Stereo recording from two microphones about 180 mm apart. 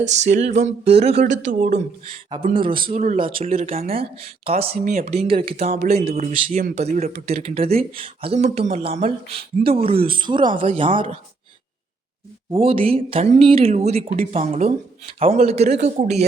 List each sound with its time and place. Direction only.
0.0 s speech: 40° right (ahead or behind)
2.0 s speech: 30° right (ahead or behind)
12.5 s speech: 30° right (ahead or behind)